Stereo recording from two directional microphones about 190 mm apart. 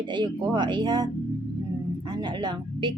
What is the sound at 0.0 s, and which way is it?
Speech, 25° right (ahead or behind).